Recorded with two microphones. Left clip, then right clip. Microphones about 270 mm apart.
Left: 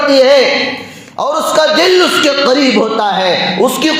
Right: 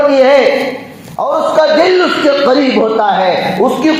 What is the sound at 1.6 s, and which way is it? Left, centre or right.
Speech, left.